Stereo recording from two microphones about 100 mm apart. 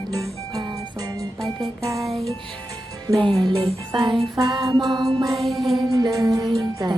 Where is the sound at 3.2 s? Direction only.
50° right (ahead or behind).